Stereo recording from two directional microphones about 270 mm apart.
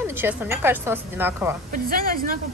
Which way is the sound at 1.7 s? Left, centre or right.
Right.